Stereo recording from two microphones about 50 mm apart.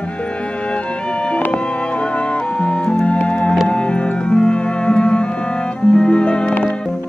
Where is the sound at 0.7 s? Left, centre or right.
Left.